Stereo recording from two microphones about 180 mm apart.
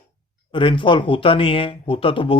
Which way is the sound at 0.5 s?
30° left (ahead or behind).